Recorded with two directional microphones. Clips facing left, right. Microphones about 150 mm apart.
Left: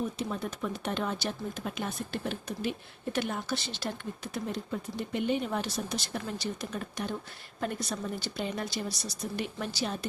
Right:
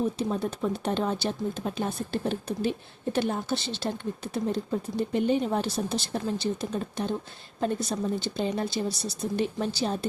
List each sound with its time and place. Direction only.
0.0 s speech: 30° right (ahead or behind)